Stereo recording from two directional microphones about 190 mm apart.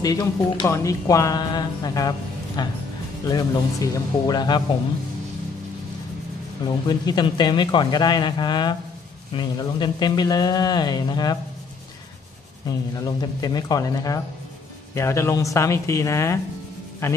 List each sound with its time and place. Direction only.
0.0 s speech: 20° left (ahead or behind)
6.9 s speech: 25° left (ahead or behind)
12.6 s speech: 20° left (ahead or behind)